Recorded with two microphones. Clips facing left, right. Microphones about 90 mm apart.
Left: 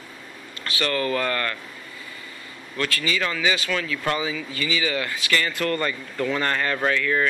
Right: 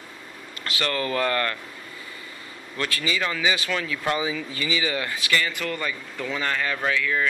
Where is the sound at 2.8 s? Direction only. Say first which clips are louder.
Left 1 dB; 20° right (ahead or behind).